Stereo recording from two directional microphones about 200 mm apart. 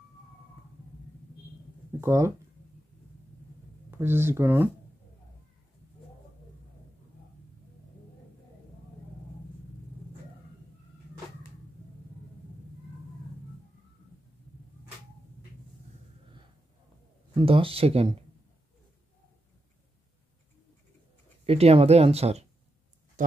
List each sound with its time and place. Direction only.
2.0 s speech: 15° right (ahead or behind)
3.9 s speech: 10° right (ahead or behind)
17.4 s speech: 25° right (ahead or behind)
21.5 s speech: 30° right (ahead or behind)
23.2 s speech: 40° right (ahead or behind)